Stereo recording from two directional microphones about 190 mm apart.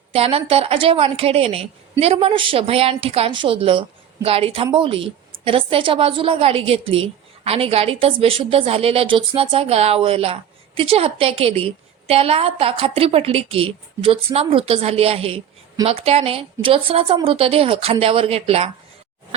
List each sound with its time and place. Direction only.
0.1 s a woman's voice: 30° right (ahead or behind)